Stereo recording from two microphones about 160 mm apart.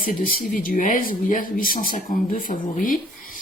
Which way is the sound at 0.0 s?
60° left (ahead or behind).